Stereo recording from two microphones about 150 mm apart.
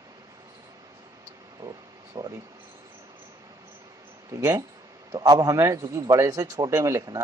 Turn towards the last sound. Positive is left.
turn(degrees=-20)  # may be behind; listen again after turning